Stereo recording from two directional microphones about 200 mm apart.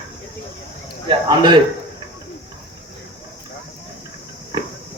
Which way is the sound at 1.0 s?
20° right (ahead or behind).